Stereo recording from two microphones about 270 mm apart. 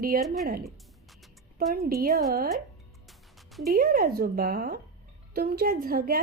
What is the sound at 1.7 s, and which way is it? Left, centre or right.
Speech, right.